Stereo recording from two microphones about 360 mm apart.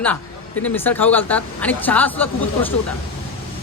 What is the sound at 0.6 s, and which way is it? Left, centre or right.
Music, centre.